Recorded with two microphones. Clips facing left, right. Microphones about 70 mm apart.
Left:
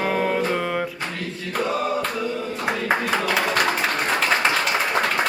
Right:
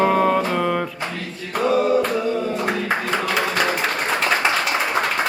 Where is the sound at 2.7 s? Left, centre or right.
Centre.